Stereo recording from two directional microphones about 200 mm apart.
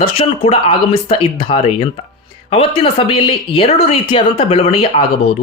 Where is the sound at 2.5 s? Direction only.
25° left (ahead or behind).